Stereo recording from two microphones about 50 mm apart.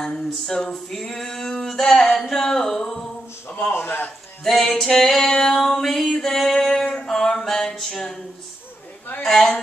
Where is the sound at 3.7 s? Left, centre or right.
Left.